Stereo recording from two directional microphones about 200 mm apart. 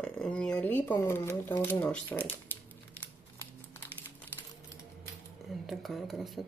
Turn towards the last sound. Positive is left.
turn(degrees=0)  # may be behind; listen again after turning